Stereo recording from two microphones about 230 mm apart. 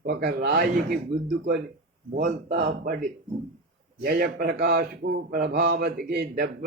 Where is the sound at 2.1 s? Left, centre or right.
Right.